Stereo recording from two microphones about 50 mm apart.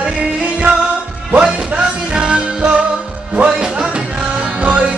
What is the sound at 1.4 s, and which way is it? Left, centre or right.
Music, centre.